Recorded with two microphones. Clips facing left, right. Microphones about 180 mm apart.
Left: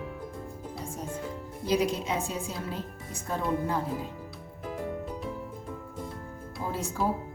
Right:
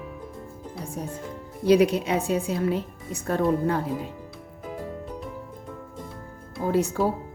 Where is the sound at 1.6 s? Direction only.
65° right (ahead or behind).